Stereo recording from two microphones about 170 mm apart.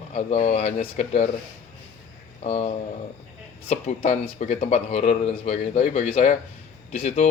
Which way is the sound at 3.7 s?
40° left (ahead or behind).